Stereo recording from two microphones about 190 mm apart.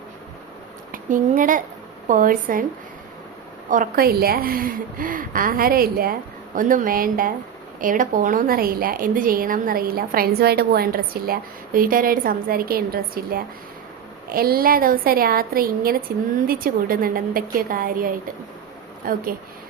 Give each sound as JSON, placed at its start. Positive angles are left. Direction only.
{"t": 0.9, "sound": "a woman's voice", "side_deg": -45}
{"t": 3.7, "sound": "a woman's voice", "side_deg": -45}